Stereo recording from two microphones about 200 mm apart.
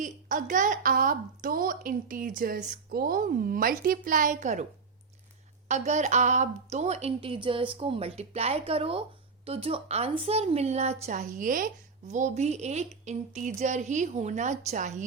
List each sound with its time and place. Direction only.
0.0 s a woman's voice: 40° right (ahead or behind)
5.6 s a woman's voice: 35° right (ahead or behind)